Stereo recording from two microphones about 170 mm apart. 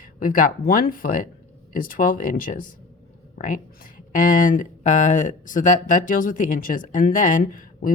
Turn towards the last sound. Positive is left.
turn(degrees=55)  # may be behind; listen again after turning